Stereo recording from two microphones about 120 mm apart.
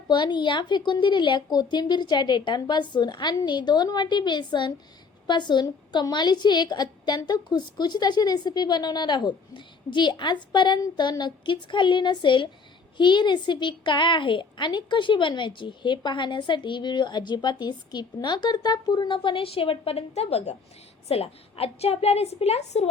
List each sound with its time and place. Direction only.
0.1 s a woman's voice: 40° left (ahead or behind); by 22.9 s 60° left (ahead or behind)